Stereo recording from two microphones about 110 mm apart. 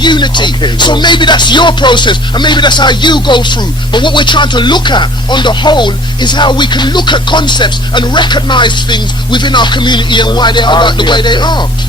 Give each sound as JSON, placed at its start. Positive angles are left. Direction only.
{"t": 0.0, "sound": "speech", "side_deg": 45}